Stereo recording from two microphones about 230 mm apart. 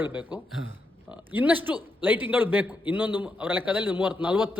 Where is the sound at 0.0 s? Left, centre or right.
Centre.